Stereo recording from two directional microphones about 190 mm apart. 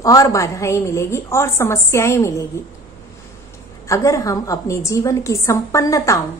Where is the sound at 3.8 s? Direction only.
15° left (ahead or behind).